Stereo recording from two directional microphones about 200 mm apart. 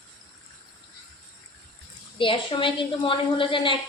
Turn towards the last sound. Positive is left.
turn(degrees=25)  # may be behind; listen again after turning